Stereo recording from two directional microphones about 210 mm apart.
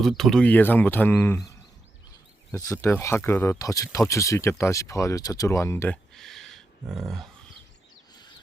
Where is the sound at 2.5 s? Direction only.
15° left (ahead or behind).